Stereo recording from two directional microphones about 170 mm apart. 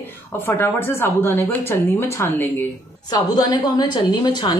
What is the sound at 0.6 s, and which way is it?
A woman's voice, 15° left (ahead or behind).